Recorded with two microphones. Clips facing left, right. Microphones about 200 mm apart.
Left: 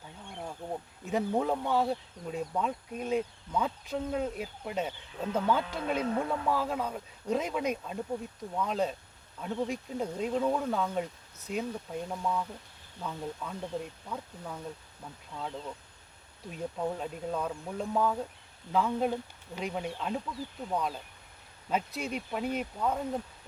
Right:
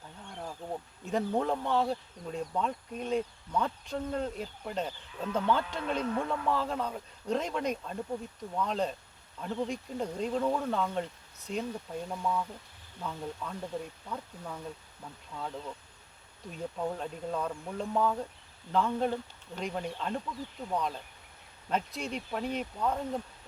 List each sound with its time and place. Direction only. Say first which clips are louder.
0.4 s speech: left 1 dB; 5° left (ahead or behind)